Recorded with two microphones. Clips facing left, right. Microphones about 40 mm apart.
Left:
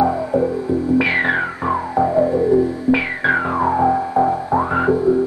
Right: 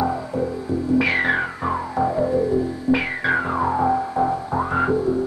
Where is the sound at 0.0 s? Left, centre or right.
Left.